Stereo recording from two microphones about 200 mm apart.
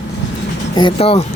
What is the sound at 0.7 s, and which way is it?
Speech, 25° left (ahead or behind).